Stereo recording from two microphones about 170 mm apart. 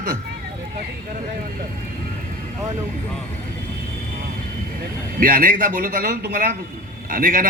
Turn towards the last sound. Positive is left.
turn(degrees=-55)  # may be behind; listen again after turning